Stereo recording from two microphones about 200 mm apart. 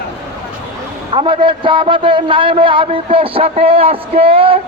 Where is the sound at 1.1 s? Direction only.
25° right (ahead or behind).